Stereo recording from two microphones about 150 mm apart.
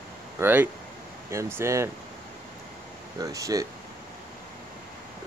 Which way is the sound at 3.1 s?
25° right (ahead or behind).